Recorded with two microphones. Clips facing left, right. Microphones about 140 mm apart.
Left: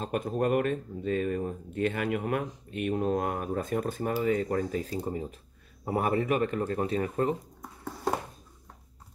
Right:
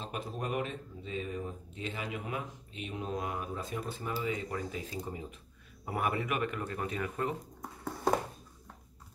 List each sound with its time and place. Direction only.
0.0 s speech: 50° left (ahead or behind); by 7.3 s 35° left (ahead or behind)